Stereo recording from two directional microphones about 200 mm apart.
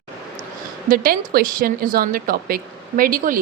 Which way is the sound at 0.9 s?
45° right (ahead or behind).